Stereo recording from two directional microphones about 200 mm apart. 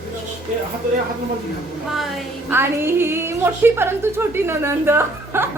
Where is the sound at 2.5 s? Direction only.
10° right (ahead or behind).